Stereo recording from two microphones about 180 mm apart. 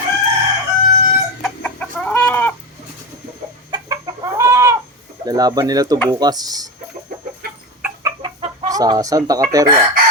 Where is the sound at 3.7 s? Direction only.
20° right (ahead or behind).